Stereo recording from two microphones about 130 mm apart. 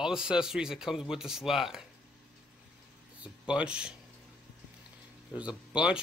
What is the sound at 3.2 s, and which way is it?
Speech, 10° right (ahead or behind).